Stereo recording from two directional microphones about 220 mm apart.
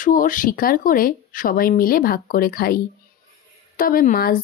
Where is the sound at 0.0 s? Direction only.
35° left (ahead or behind).